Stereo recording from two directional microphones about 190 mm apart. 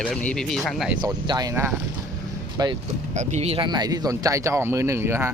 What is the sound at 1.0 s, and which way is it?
Speech, 20° right (ahead or behind).